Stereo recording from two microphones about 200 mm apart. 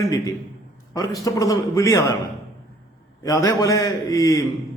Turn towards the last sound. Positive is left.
turn(degrees=15)  # may be behind; listen again after turning